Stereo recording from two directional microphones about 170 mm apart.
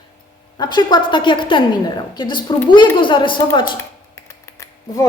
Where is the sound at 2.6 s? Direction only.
30° left (ahead or behind).